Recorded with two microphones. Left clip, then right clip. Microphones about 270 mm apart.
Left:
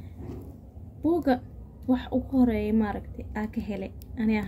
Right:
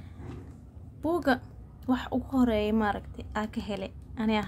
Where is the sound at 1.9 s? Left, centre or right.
Right.